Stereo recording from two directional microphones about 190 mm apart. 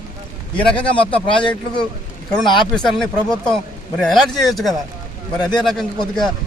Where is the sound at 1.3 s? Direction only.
25° left (ahead or behind).